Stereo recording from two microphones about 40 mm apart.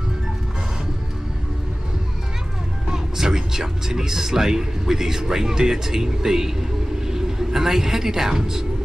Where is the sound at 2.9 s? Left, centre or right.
Centre.